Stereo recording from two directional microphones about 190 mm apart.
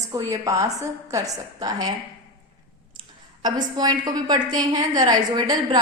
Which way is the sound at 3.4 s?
20° right (ahead or behind).